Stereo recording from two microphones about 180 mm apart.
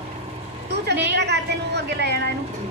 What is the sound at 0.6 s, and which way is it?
A woman's voice, 70° right (ahead or behind).